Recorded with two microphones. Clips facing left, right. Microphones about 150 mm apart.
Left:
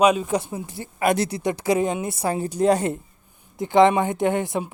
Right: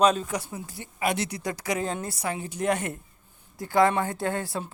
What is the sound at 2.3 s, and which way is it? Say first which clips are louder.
Speech: left 8 dB; 35° left (ahead or behind).